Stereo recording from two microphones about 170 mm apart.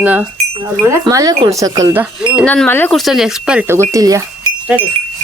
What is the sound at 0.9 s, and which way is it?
Speech, 20° right (ahead or behind).